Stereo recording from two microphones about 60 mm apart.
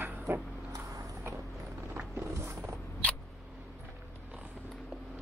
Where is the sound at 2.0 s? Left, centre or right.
Right.